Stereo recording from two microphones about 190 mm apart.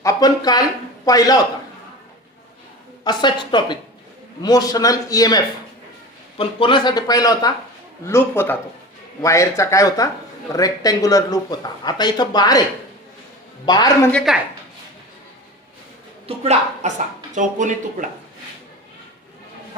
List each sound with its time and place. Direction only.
0.0 s a sound: 20° left (ahead or behind)
1.0 s speech: 20° left (ahead or behind)
3.0 s speech: 25° left (ahead or behind)
13.7 s speech: 20° left (ahead or behind)
14.1 s a woman's voice: 5° left (ahead or behind)
16.2 s speech: 35° right (ahead or behind)